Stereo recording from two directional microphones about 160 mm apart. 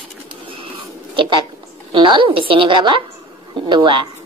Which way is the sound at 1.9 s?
30° right (ahead or behind).